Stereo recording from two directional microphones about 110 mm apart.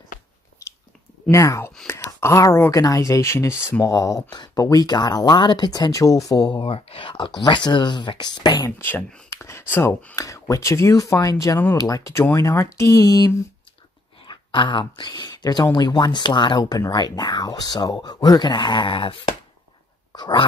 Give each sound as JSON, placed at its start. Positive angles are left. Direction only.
{"t": 1.3, "sound": "speech", "side_deg": 30}
{"t": 8.6, "sound": "speech", "side_deg": 20}
{"t": 14.2, "sound": "speech", "side_deg": 45}